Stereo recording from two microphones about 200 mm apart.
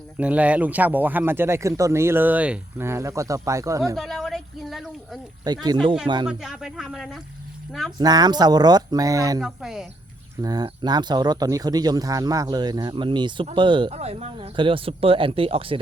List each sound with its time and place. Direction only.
0.2 s speech: 5° right (ahead or behind)
3.9 s speech: centre (ahead or behind)
5.5 s speech: 20° right (ahead or behind)
6.2 s speech: centre (ahead or behind)
7.9 s speech: 20° right (ahead or behind)
9.4 s speech: centre (ahead or behind)
10.4 s speech: 20° right (ahead or behind)